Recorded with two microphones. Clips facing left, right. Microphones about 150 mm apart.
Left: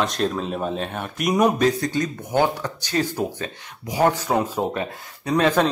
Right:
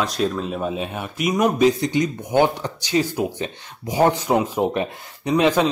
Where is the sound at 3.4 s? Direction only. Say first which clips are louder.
Right 3 dB; 25° right (ahead or behind).